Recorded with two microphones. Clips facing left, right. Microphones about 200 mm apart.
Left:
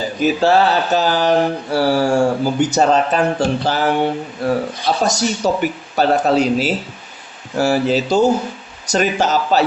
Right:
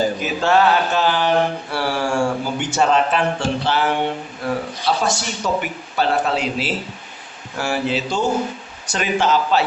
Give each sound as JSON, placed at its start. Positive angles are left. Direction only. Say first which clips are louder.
{"t": 0.4, "sound": "mantra", "louder": "even", "side_deg": 35}